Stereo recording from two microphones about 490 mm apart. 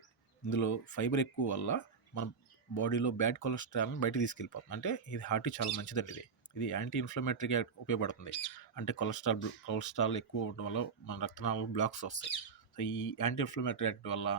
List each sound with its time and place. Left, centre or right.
0.4 s speech: left